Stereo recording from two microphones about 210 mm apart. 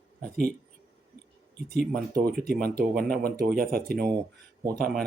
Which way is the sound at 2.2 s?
45° right (ahead or behind).